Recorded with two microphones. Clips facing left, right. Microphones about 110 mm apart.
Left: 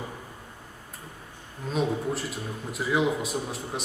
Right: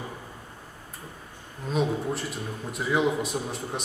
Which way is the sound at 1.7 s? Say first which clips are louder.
Right 1 dB; centre (ahead or behind).